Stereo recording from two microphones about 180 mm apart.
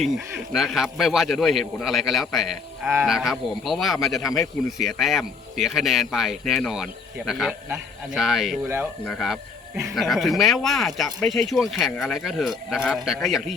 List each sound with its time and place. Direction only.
0.0 s speech: centre (ahead or behind)
8.6 s a man's voice: 10° right (ahead or behind)
9.0 s speech: centre (ahead or behind)